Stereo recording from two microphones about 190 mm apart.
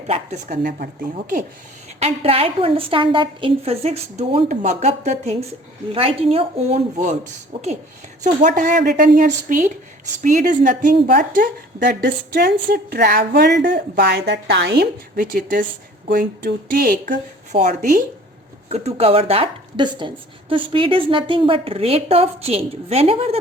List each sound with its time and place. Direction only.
0.1 s a woman's voice: 35° right (ahead or behind)
2.0 s a woman's voice: 30° right (ahead or behind)
8.2 s a woman's voice: 40° right (ahead or behind)